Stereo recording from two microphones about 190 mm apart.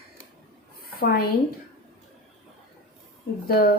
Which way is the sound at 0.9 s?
50° left (ahead or behind).